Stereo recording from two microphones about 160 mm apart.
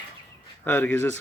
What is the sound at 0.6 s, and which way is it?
Speech, 10° left (ahead or behind).